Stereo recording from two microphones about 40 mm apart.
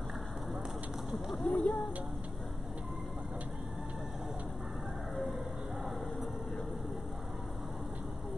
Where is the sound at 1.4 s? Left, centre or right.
Left.